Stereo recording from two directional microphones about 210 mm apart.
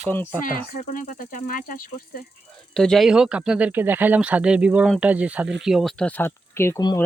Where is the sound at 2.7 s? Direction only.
Centre (ahead or behind).